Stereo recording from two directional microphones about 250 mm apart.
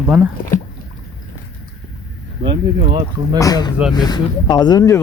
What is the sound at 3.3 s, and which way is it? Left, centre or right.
Speech, centre.